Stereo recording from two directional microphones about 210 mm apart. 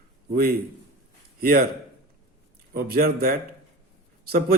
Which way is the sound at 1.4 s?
45° right (ahead or behind).